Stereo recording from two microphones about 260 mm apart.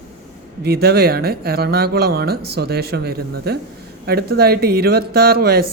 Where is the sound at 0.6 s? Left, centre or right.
Right.